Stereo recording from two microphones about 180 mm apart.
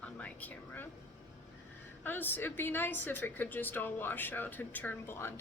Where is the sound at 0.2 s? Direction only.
10° left (ahead or behind).